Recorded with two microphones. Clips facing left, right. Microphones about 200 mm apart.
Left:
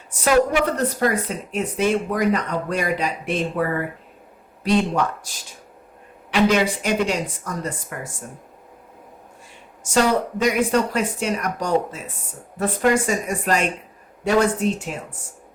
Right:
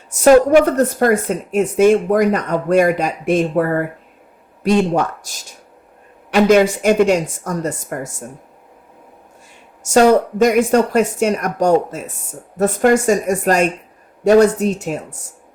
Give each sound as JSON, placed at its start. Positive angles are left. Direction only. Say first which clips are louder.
{"t": 0.1, "sound": "a woman's voice", "louder": "right 9 dB", "side_deg": -45}
{"t": 6.3, "sound": "a woman's voice", "louder": "right 6 dB", "side_deg": -45}
{"t": 9.9, "sound": "a woman's voice", "louder": "right 8 dB", "side_deg": -45}